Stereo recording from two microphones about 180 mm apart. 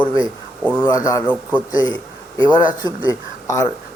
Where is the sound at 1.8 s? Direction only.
25° right (ahead or behind).